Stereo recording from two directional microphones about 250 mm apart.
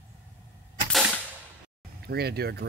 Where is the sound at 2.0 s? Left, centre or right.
Right.